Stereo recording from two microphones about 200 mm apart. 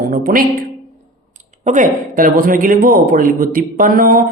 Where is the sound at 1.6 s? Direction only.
40° right (ahead or behind).